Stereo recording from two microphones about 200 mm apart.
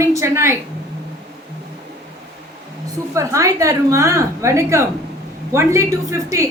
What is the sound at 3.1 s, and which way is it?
A woman's voice, 15° right (ahead or behind).